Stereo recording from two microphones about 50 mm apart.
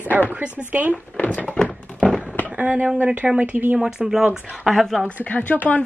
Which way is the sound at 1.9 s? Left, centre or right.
Centre.